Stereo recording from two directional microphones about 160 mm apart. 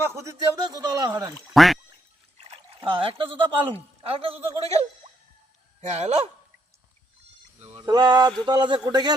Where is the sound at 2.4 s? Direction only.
35° right (ahead or behind).